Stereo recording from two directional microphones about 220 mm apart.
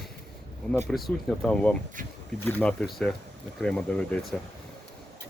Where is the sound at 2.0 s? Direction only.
35° right (ahead or behind).